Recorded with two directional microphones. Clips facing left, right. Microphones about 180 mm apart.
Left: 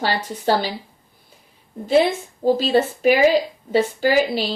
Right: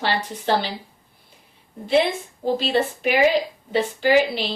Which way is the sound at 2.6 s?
40° left (ahead or behind).